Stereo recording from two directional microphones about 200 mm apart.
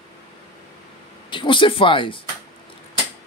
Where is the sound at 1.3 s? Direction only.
25° left (ahead or behind).